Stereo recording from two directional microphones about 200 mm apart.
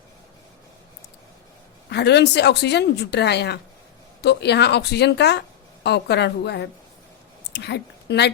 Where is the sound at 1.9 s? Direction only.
55° left (ahead or behind).